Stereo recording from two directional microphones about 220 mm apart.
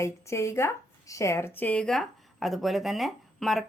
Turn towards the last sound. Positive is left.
turn(degrees=0)  # may be behind; listen again after turning